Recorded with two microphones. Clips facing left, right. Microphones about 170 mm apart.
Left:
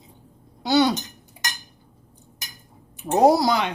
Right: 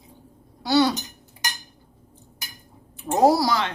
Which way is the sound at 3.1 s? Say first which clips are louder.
Left 2 dB; 20° left (ahead or behind).